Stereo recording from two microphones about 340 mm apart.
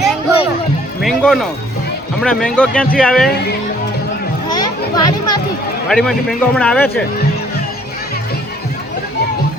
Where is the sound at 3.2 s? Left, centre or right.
Left.